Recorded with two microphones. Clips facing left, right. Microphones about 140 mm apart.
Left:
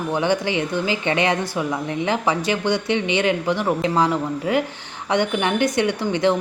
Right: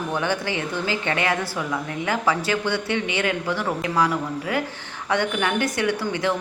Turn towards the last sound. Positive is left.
turn(degrees=25)  # may be behind; listen again after turning